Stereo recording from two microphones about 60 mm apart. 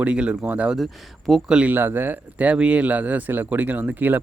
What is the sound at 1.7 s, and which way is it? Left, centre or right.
Speech, right.